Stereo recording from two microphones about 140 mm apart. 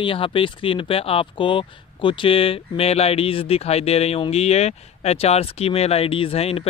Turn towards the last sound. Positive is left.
turn(degrees=45)  # may be behind; listen again after turning